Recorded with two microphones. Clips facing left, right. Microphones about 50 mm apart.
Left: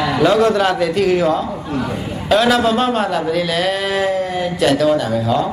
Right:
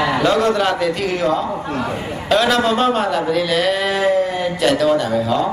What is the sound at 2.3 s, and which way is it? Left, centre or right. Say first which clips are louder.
A man's voice: left 2 dB; centre.